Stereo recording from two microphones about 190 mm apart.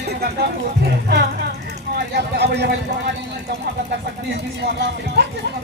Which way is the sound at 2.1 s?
60° right (ahead or behind).